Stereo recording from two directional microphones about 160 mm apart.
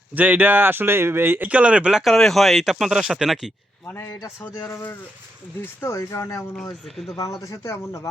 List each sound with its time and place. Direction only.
0.1 s speech: 10° right (ahead or behind)
3.8 s a man's voice: 15° left (ahead or behind)
4.5 s speech: 25° left (ahead or behind)
5.8 s speech: 20° left (ahead or behind)
6.8 s speech: centre (ahead or behind)
7.2 s speech: 20° left (ahead or behind)